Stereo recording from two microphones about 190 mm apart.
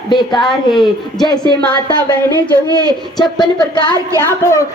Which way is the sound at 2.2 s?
20° right (ahead or behind).